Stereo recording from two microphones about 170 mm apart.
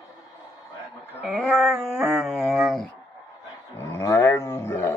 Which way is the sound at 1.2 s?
5° right (ahead or behind).